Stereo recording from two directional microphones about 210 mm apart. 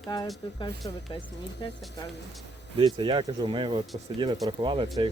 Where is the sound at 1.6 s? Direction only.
20° left (ahead or behind).